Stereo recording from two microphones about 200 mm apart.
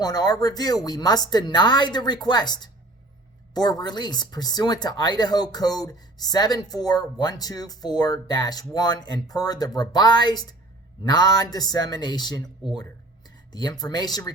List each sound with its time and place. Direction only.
0.0 s speech: 20° left (ahead or behind)